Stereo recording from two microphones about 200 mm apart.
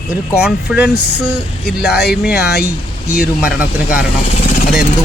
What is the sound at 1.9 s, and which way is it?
Speech, 55° left (ahead or behind).